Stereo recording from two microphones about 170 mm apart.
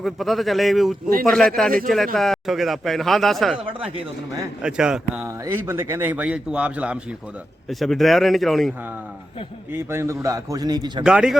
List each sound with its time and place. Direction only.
0.0 s speech: centre (ahead or behind)
3.8 s speech: 35° right (ahead or behind)
4.6 s speech: 5° right (ahead or behind)
9.7 s a man's voice: 15° right (ahead or behind)
11.0 s speech: 5° right (ahead or behind)